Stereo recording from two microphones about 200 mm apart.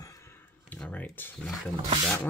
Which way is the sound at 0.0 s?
15° left (ahead or behind).